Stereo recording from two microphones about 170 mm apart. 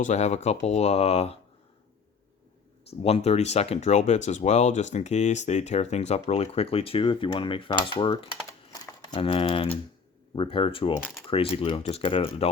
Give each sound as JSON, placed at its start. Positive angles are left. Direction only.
{"t": 0.0, "sound": "speech", "side_deg": 40}
{"t": 3.0, "sound": "speech", "side_deg": 35}
{"t": 8.7, "sound": "typing", "side_deg": 20}
{"t": 10.3, "sound": "speech", "side_deg": 30}